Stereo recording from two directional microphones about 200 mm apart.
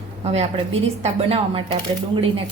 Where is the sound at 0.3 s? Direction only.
30° right (ahead or behind).